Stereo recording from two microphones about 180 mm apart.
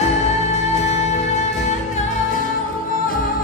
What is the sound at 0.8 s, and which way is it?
Music, 40° left (ahead or behind).